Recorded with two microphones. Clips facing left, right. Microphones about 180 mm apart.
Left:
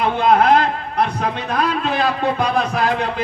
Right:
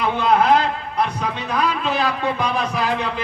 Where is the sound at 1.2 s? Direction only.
55° left (ahead or behind).